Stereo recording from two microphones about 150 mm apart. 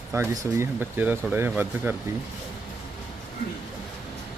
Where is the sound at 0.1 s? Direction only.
20° right (ahead or behind).